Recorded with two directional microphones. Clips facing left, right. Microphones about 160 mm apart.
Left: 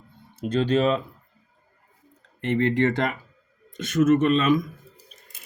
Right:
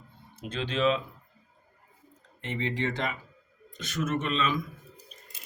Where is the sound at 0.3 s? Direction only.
40° left (ahead or behind).